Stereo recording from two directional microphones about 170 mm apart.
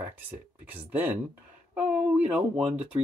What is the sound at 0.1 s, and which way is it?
Speech, 10° right (ahead or behind).